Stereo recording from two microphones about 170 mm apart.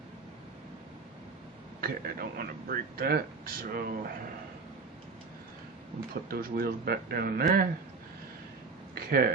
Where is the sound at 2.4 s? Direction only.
60° right (ahead or behind).